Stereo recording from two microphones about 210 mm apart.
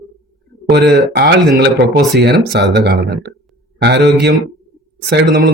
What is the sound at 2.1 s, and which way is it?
A man's voice, 50° right (ahead or behind).